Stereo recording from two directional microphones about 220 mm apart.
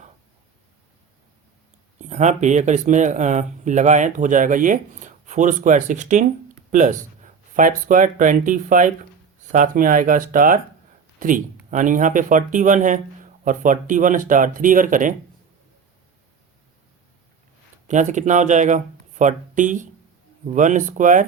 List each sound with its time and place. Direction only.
2.0 s speech: 30° right (ahead or behind)
17.8 s speech: 35° right (ahead or behind)